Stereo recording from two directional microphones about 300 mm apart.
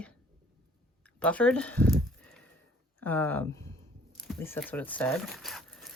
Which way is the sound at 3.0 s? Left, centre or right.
Centre.